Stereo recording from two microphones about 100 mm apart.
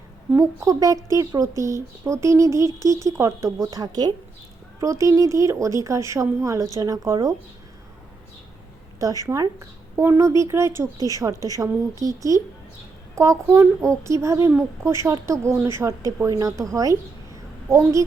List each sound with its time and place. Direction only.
0.3 s speech: 35° right (ahead or behind)
9.0 s speech: 35° right (ahead or behind)
9.9 s speech: 25° right (ahead or behind)